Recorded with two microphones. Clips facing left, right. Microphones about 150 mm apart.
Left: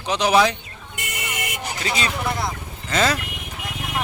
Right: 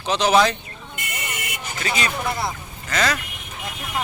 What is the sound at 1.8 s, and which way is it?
Speech, 30° left (ahead or behind).